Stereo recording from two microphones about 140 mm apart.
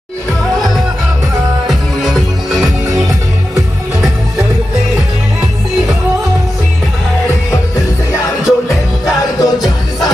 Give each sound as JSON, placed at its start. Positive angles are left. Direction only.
{"t": 0.6, "sound": "music", "side_deg": 0}
{"t": 7.5, "sound": "music", "side_deg": 25}
{"t": 9.6, "sound": "music", "side_deg": 0}